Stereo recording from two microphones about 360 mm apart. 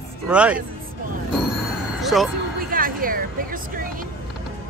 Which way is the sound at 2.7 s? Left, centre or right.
Right.